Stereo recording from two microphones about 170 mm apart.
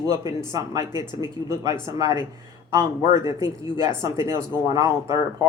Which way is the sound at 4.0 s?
15° right (ahead or behind).